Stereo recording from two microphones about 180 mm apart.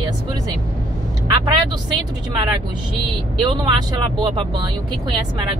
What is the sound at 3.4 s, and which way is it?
Speech, 25° right (ahead or behind).